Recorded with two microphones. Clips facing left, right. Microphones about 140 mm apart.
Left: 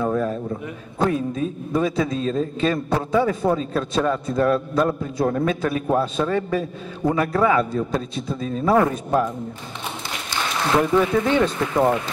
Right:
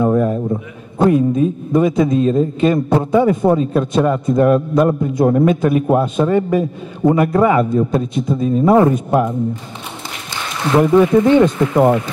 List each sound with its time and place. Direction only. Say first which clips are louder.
0.0 s a man's voice: right 7 dB; 15° right (ahead or behind)
10.8 s a man's voice: right 9 dB; 20° right (ahead or behind)